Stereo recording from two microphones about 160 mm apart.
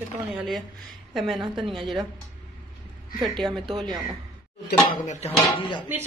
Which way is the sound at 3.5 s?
30° right (ahead or behind).